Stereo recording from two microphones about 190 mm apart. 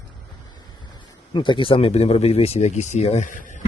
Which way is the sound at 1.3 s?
25° left (ahead or behind).